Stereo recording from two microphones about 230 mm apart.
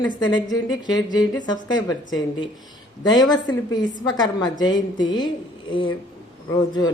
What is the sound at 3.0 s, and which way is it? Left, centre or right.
Speech, centre.